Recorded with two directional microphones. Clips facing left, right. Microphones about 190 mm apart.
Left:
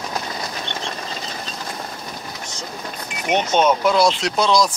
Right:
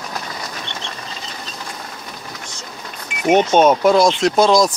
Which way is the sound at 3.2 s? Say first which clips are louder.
Right 5 dB; 50° right (ahead or behind).